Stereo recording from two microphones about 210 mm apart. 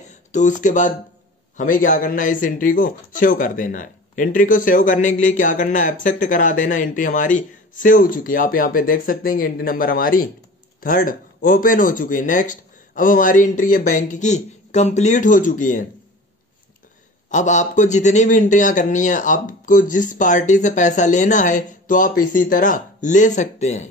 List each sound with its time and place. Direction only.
0.3 s speech: 35° left (ahead or behind)
17.3 s speech: 35° left (ahead or behind)